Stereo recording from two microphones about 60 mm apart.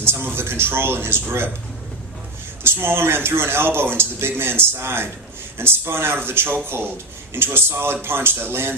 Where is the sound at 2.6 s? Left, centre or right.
Right.